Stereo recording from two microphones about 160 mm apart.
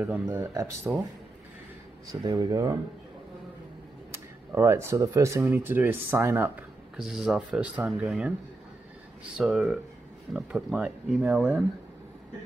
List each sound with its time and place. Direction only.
0.0 s speech: 15° right (ahead or behind)
0.9 s speech: 5° right (ahead or behind)
2.2 s speech: 20° right (ahead or behind)
4.1 s speech: 15° right (ahead or behind)
9.4 s speech: centre (ahead or behind)